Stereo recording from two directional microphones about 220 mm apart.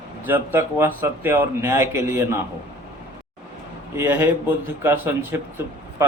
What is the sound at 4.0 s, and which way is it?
Speech, 10° right (ahead or behind).